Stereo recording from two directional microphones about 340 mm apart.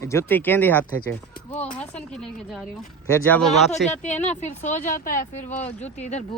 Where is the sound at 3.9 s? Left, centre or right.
Centre.